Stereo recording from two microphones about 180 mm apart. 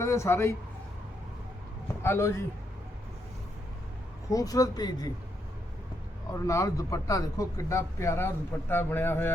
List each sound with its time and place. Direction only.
0.0 s a man's voice: 15° left (ahead or behind)
2.0 s a man's voice: 15° left (ahead or behind)
4.3 s speech: 20° left (ahead or behind)
6.4 s a man's voice: 20° left (ahead or behind)